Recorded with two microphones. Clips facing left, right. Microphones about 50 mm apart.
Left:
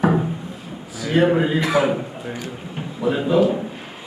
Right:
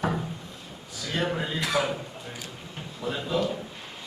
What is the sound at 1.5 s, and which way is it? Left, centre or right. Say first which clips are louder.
Speech: left 8 dB; centre.